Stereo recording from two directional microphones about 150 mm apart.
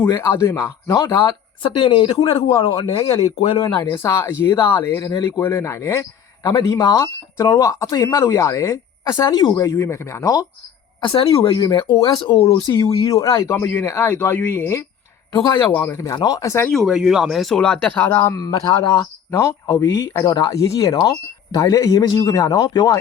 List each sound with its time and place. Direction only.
0.0 s speech: 15° left (ahead or behind)
1.6 s speech: 35° left (ahead or behind)
4.0 s speech: 20° left (ahead or behind)
11.0 s speech: 35° left (ahead or behind)
12.8 s speech: 20° left (ahead or behind)
16.6 s speech: centre (ahead or behind); by 23.0 s 30° left (ahead or behind)